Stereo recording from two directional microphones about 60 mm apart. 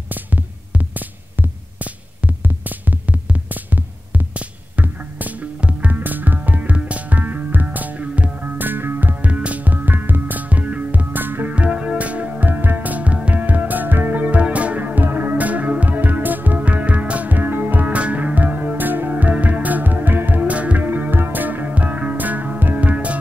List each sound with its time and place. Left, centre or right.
0.1 s music: right
9.2 s music: right
11.5 s music: centre